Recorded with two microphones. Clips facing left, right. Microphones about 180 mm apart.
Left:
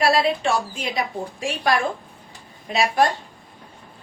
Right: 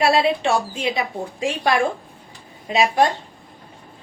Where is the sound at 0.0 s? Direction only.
25° right (ahead or behind).